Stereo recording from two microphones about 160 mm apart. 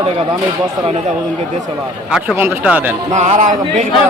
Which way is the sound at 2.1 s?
10° right (ahead or behind).